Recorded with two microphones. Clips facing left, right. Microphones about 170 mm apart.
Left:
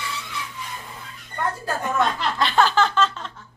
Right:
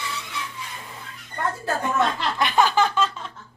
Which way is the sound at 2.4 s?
15° right (ahead or behind).